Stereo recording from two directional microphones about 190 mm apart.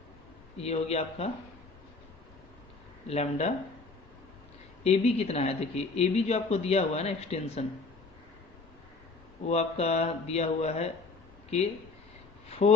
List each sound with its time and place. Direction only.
0.5 s speech: 35° left (ahead or behind)
3.1 s speech: 35° left (ahead or behind)
4.8 s speech: 35° left (ahead or behind)
9.5 s speech: 35° left (ahead or behind)
12.6 s speech: 35° left (ahead or behind)